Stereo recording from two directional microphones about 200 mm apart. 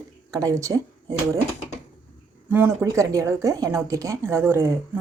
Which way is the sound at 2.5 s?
15° right (ahead or behind).